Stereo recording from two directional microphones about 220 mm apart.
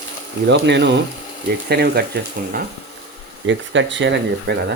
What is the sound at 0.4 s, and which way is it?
Speech, 50° right (ahead or behind).